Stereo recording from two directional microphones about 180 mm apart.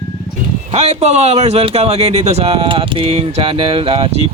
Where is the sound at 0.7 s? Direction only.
35° right (ahead or behind).